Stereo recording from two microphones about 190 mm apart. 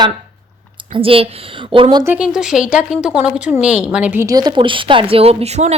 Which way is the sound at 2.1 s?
5° right (ahead or behind).